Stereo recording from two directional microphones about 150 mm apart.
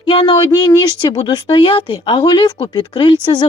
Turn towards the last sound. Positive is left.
turn(degrees=30)  # may be behind; listen again after turning